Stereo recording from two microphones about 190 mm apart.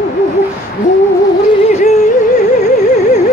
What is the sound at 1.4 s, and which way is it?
Music, 35° left (ahead or behind).